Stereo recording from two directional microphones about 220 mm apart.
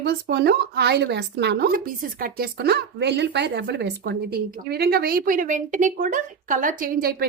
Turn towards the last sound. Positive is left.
turn(degrees=-45)  # may be behind; listen again after turning